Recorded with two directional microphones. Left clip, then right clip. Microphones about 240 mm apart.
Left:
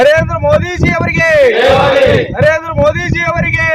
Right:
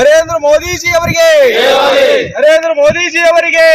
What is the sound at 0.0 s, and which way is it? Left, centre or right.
Speech, centre.